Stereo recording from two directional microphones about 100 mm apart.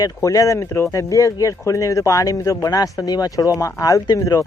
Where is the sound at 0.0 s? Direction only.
35° left (ahead or behind).